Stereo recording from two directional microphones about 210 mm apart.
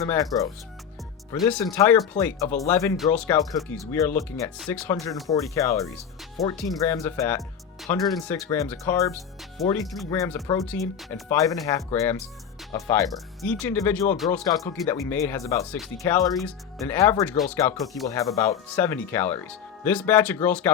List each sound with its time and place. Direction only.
0.0 s speech: 15° left (ahead or behind)
9.6 s speech: centre (ahead or behind)
10.1 s speech: 15° left (ahead or behind)
16.8 s speech: 10° left (ahead or behind)